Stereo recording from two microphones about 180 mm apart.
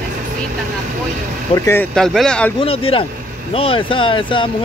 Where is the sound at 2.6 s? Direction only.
30° left (ahead or behind).